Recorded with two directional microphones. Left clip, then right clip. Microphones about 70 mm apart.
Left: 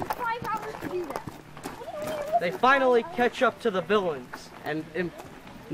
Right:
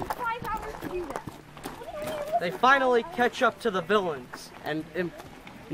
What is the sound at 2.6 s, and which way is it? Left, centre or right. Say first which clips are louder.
Speech: even; right.